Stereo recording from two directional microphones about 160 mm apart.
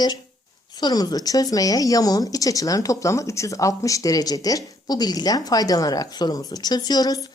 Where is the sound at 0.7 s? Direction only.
25° left (ahead or behind).